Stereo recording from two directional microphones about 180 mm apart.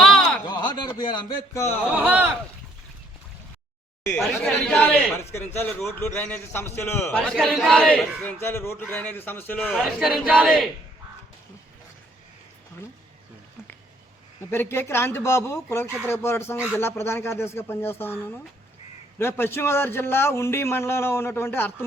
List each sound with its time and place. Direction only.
0.0 s a sound: centre (ahead or behind)
0.4 s speech: 25° left (ahead or behind)
1.9 s speech: 10° right (ahead or behind)
4.1 s a man's voice: 10° left (ahead or behind)
7.2 s a man's voice: centre (ahead or behind)
9.6 s speech: centre (ahead or behind)
14.5 s a man's voice: 10° left (ahead or behind)
19.2 s a man's voice: 15° left (ahead or behind)